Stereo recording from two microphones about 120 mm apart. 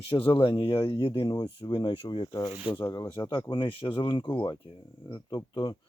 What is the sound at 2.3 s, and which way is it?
Speech, 25° left (ahead or behind).